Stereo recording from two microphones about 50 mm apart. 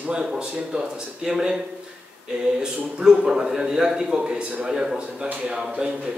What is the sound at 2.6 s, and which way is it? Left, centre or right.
A man's voice, centre.